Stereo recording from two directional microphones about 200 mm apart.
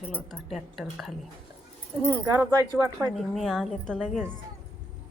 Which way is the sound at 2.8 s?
Centre (ahead or behind).